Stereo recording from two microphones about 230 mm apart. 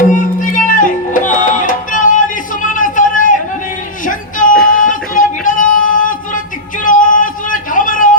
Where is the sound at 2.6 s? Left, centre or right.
Left.